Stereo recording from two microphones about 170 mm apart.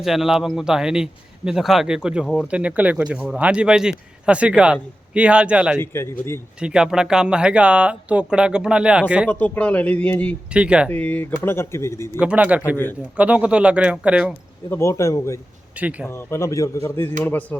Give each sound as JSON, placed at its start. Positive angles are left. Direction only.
{"t": 0.0, "sound": "a man's voice", "side_deg": 0}
{"t": 5.8, "sound": "speech", "side_deg": 15}
{"t": 6.6, "sound": "speech", "side_deg": -5}
{"t": 9.3, "sound": "speech", "side_deg": 10}
{"t": 10.5, "sound": "a man's voice", "side_deg": -5}
{"t": 10.8, "sound": "speech", "side_deg": 10}
{"t": 12.2, "sound": "a man's voice", "side_deg": -5}
{"t": 12.6, "sound": "speech", "side_deg": 15}
{"t": 13.1, "sound": "a man's voice", "side_deg": -10}
{"t": 14.7, "sound": "speech", "side_deg": 15}
{"t": 15.8, "sound": "a man's voice", "side_deg": -10}
{"t": 16.0, "sound": "speech", "side_deg": 15}